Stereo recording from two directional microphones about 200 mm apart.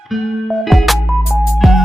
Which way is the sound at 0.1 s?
Centre (ahead or behind).